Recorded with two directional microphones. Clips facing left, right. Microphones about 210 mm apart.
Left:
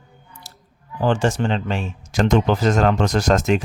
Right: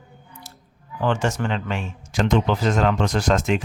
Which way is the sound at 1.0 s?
35° left (ahead or behind).